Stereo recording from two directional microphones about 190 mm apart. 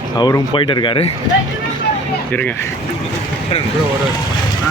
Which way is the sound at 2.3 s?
10° left (ahead or behind).